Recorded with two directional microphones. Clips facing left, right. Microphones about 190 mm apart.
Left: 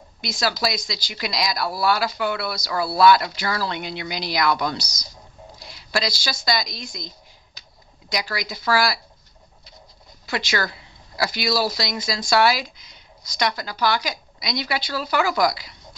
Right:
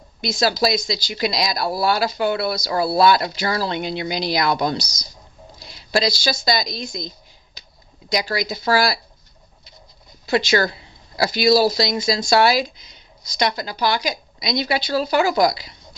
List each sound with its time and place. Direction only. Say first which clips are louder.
0.2 s speech: right 5 dB; 25° right (ahead or behind)
10.2 s speech: right 7 dB; 25° right (ahead or behind)